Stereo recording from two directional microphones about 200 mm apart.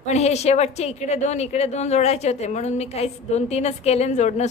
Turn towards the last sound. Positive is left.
turn(degrees=35)  # may be behind; listen again after turning